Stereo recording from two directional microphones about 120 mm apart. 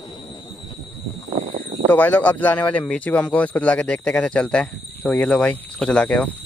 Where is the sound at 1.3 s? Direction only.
60° right (ahead or behind).